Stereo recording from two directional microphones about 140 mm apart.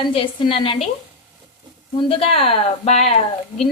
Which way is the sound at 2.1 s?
45° left (ahead or behind).